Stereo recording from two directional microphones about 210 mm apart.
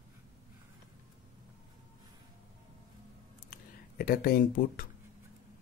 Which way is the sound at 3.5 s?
45° left (ahead or behind).